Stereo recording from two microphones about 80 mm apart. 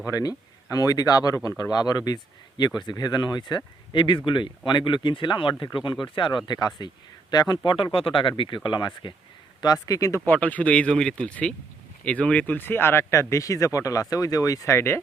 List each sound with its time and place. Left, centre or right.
0.1 s speech: left
4.3 s speech: left
9.6 s speech: left
10.2 s speech: centre